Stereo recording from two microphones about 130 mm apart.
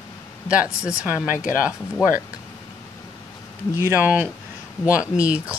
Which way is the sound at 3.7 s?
15° right (ahead or behind).